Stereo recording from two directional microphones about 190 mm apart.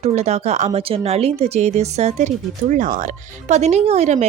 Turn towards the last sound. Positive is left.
turn(degrees=-35)  # may be behind; listen again after turning